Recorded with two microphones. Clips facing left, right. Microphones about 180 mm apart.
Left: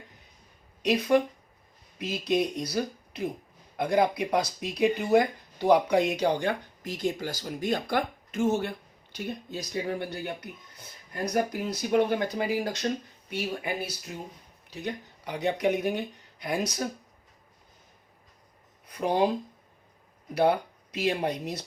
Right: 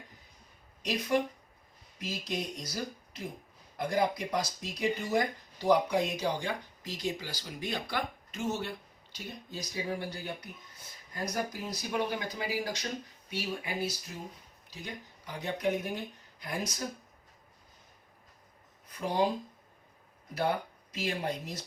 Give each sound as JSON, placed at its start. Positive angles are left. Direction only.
{"t": 0.8, "sound": "speech", "side_deg": 65}
{"t": 14.7, "sound": "speech", "side_deg": 65}
{"t": 18.9, "sound": "speech", "side_deg": 65}
{"t": 20.9, "sound": "speech", "side_deg": 65}